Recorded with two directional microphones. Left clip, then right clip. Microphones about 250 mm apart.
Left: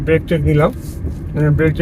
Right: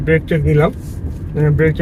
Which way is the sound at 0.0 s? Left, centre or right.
Centre.